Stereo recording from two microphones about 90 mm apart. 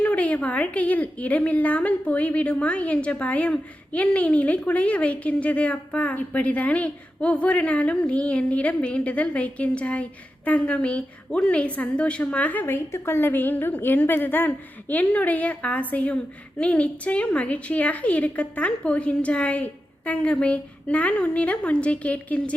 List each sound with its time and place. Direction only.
0.0 s a woman's voice: 15° left (ahead or behind)